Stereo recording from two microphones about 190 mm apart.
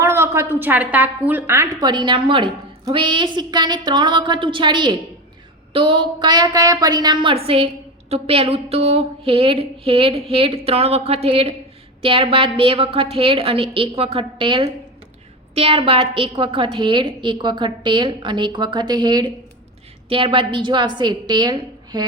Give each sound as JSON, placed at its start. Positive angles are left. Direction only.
{"t": 0.0, "sound": "a woman's voice", "side_deg": -15}